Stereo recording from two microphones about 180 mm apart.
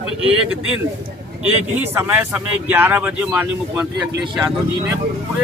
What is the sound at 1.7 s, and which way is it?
Speech, 10° right (ahead or behind).